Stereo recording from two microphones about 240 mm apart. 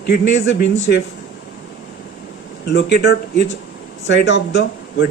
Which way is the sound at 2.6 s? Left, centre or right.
Left.